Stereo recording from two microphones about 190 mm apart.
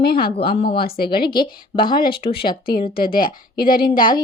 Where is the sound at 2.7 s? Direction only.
50° left (ahead or behind).